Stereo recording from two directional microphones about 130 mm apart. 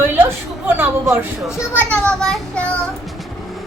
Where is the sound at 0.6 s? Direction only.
15° right (ahead or behind).